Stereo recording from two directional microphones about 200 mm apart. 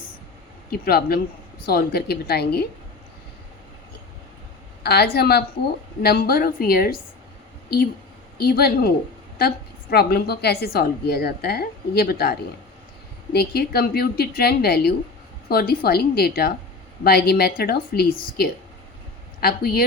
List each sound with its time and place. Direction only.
0.7 s a woman's voice: 50° left (ahead or behind)
4.8 s a woman's voice: 55° left (ahead or behind)
8.4 s a woman's voice: 50° left (ahead or behind)
9.9 s a woman's voice: 50° left (ahead or behind)